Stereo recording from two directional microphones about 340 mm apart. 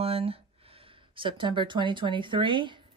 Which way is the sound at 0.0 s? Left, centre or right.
Centre.